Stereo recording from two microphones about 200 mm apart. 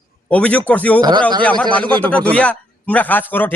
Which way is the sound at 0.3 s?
5° left (ahead or behind).